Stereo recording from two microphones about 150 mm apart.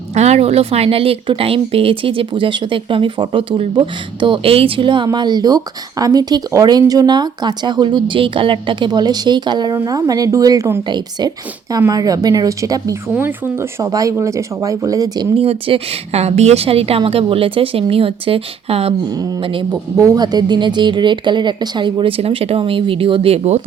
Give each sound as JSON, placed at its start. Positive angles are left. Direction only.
{"t": 0.1, "sound": "speech", "side_deg": -45}
{"t": 15.4, "sound": "speech", "side_deg": -40}
{"t": 20.0, "sound": "speech", "side_deg": -25}